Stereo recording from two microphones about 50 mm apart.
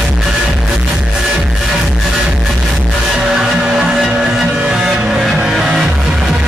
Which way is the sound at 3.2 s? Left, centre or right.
Centre.